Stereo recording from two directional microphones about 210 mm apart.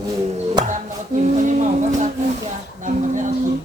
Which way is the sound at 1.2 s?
35° right (ahead or behind).